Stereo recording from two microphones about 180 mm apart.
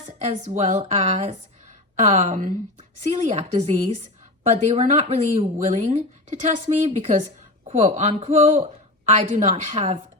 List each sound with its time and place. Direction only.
0.2 s speech: 40° right (ahead or behind)